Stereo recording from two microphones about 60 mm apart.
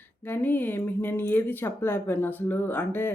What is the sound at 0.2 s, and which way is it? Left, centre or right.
Speech, left.